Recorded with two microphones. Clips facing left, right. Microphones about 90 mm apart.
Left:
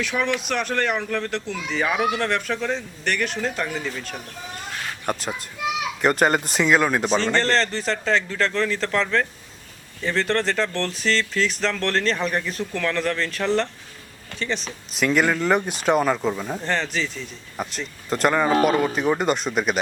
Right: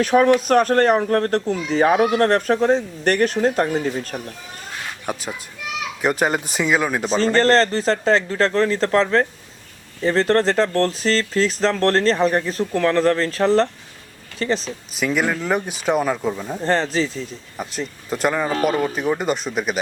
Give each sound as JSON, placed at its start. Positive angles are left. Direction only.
{"t": 0.0, "sound": "speech", "side_deg": -45}
{"t": 5.1, "sound": "speech", "side_deg": -5}
{"t": 7.3, "sound": "speech", "side_deg": -40}
{"t": 14.9, "sound": "speech", "side_deg": 0}
{"t": 16.6, "sound": "speech", "side_deg": -35}
{"t": 17.6, "sound": "speech", "side_deg": -5}